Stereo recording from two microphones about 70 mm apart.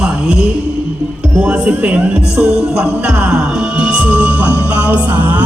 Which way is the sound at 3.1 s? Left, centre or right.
Centre.